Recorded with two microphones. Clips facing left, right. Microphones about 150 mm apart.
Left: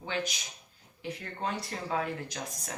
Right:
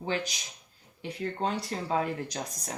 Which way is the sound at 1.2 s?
30° right (ahead or behind).